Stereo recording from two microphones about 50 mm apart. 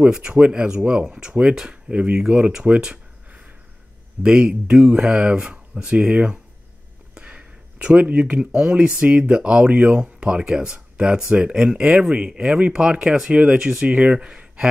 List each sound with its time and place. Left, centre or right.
0.1 s speech: centre
1.9 s speech: right
2.8 s a sound: centre
4.2 s speech: centre
7.2 s a sound: centre
8.3 s speech: centre